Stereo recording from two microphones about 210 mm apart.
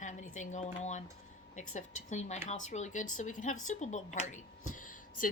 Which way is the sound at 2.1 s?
35° left (ahead or behind).